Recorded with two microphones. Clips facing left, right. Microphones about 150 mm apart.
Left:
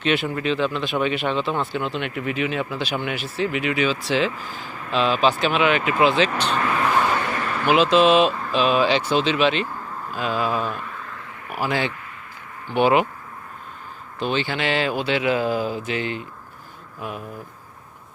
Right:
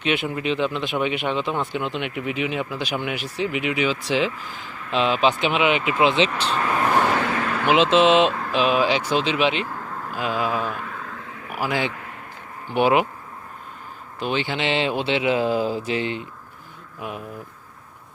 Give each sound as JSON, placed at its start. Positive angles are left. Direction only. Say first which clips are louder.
{"t": 0.0, "sound": "speech", "louder": "left 1 dB", "side_deg": -15}
{"t": 7.2, "sound": "a sound", "louder": "right 2 dB", "side_deg": -90}
{"t": 7.7, "sound": "speech", "louder": "even", "side_deg": -25}
{"t": 14.2, "sound": "speech", "louder": "left 1 dB", "side_deg": -15}
{"t": 17.0, "sound": "speech", "louder": "even", "side_deg": -20}